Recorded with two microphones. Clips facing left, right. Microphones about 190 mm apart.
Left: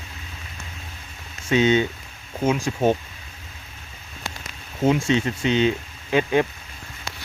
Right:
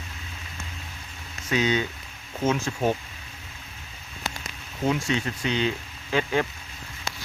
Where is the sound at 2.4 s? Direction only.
15° left (ahead or behind).